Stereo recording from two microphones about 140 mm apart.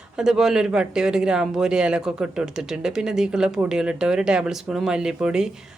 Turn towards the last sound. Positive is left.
turn(degrees=-5)  # may be behind; listen again after turning